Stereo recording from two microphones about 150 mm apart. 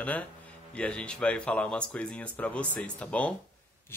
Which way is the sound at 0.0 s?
10° left (ahead or behind).